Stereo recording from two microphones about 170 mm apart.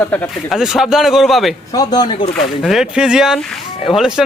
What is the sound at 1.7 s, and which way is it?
Speech, 25° left (ahead or behind).